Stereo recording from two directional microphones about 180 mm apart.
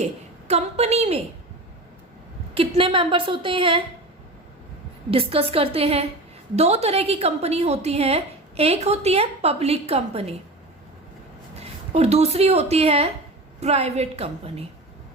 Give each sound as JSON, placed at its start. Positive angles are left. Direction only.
{"t": 0.0, "sound": "a woman's voice", "side_deg": -35}
{"t": 2.6, "sound": "a woman's voice", "side_deg": -30}
{"t": 5.1, "sound": "a woman's voice", "side_deg": -30}
{"t": 11.6, "sound": "a woman's voice", "side_deg": -35}